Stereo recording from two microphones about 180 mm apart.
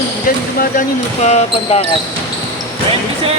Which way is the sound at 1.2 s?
35° left (ahead or behind).